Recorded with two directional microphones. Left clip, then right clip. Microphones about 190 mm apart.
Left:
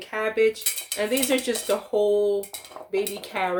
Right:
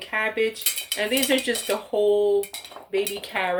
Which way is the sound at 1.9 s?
25° left (ahead or behind).